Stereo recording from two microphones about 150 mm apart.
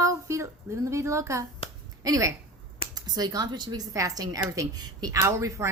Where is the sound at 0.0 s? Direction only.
20° right (ahead or behind).